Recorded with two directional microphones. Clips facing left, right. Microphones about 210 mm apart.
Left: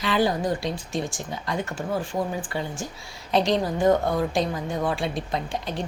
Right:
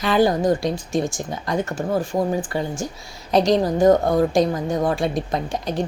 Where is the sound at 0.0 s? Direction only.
45° right (ahead or behind).